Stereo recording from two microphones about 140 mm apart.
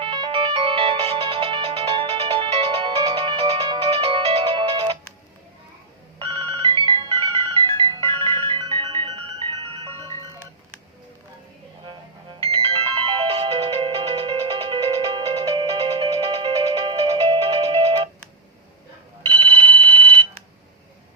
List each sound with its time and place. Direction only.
0.0 s ringtone: 35° right (ahead or behind)
6.1 s ringtone: 40° right (ahead or behind)
12.4 s ringtone: 40° right (ahead or behind)
19.3 s a sound: 35° right (ahead or behind)